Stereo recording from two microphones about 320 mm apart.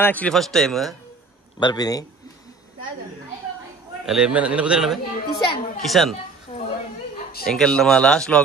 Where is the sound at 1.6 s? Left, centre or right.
Centre.